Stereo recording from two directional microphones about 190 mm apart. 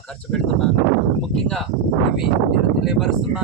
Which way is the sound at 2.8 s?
5° right (ahead or behind).